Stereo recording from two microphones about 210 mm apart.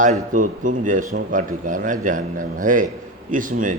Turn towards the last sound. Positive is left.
turn(degrees=-40)  # may be behind; listen again after turning